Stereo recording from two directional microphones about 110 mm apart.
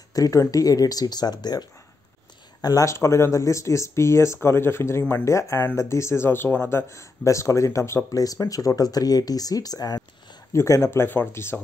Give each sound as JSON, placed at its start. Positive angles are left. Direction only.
{"t": 0.1, "sound": "speech", "side_deg": 30}